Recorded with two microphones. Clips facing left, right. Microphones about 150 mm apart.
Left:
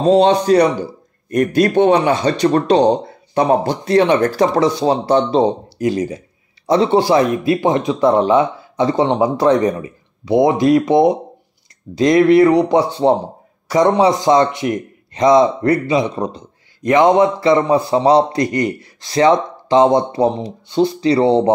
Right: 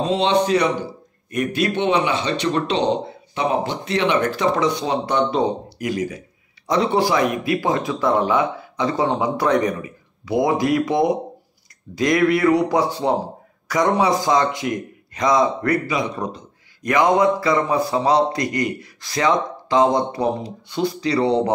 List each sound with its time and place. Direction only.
0.0 s a man's voice: 40° left (ahead or behind)